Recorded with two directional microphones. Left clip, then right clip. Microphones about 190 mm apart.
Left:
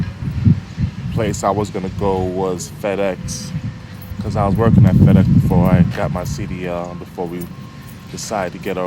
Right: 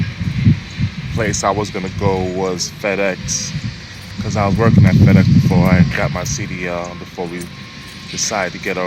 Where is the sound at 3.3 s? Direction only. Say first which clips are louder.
Right 8 dB; 35° left (ahead or behind).